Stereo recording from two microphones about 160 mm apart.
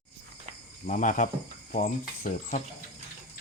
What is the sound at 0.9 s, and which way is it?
Speech, 55° left (ahead or behind).